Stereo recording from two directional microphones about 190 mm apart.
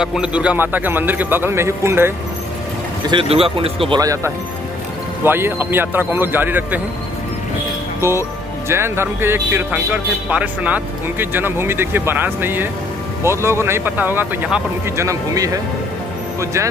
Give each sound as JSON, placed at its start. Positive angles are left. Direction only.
{"t": 0.0, "sound": "speech", "side_deg": -5}
{"t": 3.1, "sound": "speech", "side_deg": -30}
{"t": 8.6, "sound": "speech", "side_deg": -15}